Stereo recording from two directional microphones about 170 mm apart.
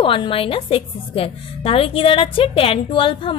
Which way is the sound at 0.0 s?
30° left (ahead or behind).